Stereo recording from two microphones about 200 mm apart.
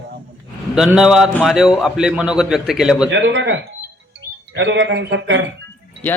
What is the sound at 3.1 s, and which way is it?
A man's voice, 65° right (ahead or behind).